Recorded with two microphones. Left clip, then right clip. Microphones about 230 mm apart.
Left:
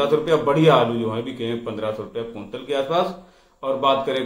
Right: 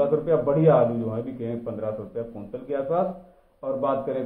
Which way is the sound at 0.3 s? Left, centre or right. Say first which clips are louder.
Left 4 dB; centre.